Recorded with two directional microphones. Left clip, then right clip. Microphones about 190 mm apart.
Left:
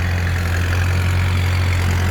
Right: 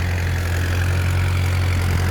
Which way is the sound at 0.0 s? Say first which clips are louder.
Left 3 dB; 35° right (ahead or behind).